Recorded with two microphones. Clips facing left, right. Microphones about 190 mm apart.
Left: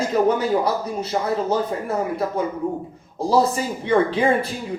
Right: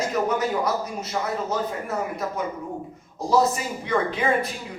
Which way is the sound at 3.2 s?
30° left (ahead or behind).